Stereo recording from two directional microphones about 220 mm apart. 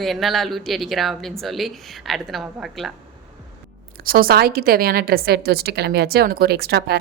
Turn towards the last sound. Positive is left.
turn(degrees=-45)  # may be behind; listen again after turning